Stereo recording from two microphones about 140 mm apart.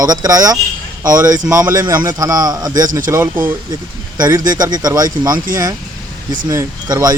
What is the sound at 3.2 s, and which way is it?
Speech, 15° right (ahead or behind).